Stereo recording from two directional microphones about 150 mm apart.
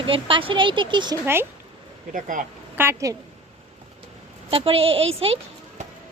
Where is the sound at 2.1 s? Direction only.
65° right (ahead or behind).